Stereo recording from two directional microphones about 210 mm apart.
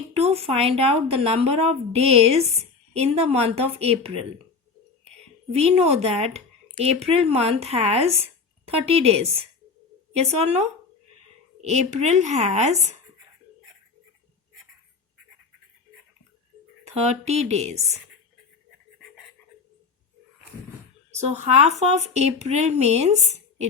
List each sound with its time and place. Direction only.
0.2 s speech: 30° right (ahead or behind)
5.5 s speech: 30° right (ahead or behind)
11.6 s speech: 30° right (ahead or behind)
16.8 s speech: 30° right (ahead or behind)
21.2 s speech: 30° right (ahead or behind)